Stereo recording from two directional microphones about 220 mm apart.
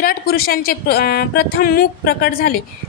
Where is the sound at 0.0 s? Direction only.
45° left (ahead or behind).